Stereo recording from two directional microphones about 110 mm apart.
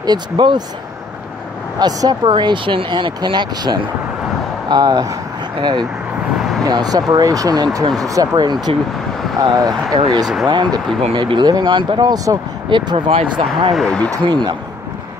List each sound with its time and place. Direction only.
0.0 s speech: 40° right (ahead or behind)
1.8 s speech: 35° right (ahead or behind); by 13.7 s 60° right (ahead or behind)
13.7 s speech: 10° left (ahead or behind)
14.2 s speech: 45° right (ahead or behind)